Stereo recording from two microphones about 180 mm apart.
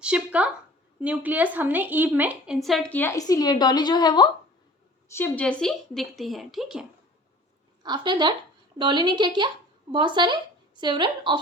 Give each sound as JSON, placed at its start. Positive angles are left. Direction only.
{"t": 0.0, "sound": "a woman's voice", "side_deg": -5}
{"t": 5.0, "sound": "a woman's voice", "side_deg": 15}
{"t": 7.9, "sound": "a woman's voice", "side_deg": -25}